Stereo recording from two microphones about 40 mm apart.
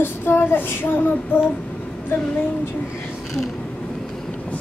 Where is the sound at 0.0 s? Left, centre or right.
Left.